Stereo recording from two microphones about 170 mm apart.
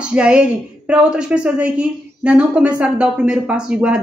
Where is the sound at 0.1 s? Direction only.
5° right (ahead or behind).